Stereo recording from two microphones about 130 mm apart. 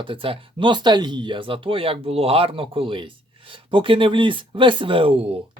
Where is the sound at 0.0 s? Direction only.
40° right (ahead or behind).